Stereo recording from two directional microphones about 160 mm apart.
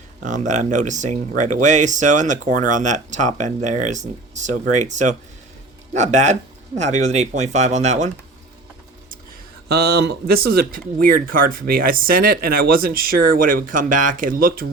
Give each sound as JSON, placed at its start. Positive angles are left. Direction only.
{"t": 0.2, "sound": "speech", "side_deg": -50}
{"t": 9.6, "sound": "speech", "side_deg": -80}